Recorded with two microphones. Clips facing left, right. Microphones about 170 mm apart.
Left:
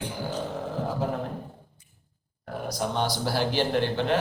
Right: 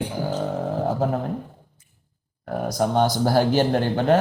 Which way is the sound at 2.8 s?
45° right (ahead or behind).